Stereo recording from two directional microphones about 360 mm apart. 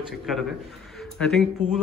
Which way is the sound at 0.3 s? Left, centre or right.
Centre.